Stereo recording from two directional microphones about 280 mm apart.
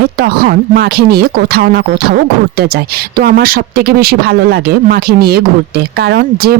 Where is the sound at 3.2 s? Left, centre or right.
Right.